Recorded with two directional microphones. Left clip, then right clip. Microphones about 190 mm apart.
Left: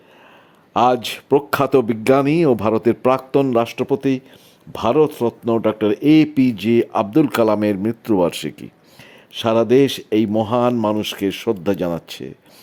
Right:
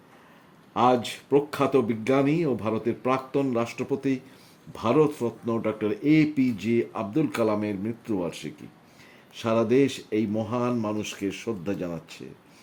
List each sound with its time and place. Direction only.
0.7 s speech: 35° left (ahead or behind)